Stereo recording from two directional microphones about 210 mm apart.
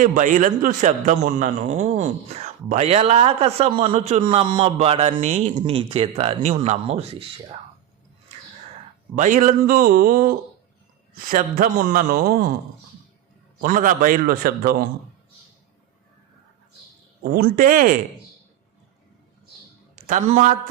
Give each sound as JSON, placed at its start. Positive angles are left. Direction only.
{"t": 0.0, "sound": "a man's voice", "side_deg": -35}
{"t": 9.1, "sound": "a man's voice", "side_deg": -35}
{"t": 13.6, "sound": "a man's voice", "side_deg": -40}
{"t": 17.2, "sound": "a man's voice", "side_deg": -45}
{"t": 20.1, "sound": "a man's voice", "side_deg": -35}